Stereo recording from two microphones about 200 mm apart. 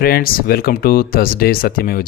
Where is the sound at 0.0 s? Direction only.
45° left (ahead or behind).